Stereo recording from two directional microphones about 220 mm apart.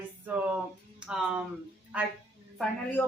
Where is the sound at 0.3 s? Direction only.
5° right (ahead or behind).